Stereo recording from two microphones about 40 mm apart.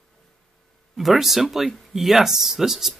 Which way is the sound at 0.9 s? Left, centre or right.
Centre.